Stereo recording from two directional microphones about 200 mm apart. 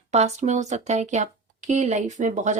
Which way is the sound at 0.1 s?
35° right (ahead or behind).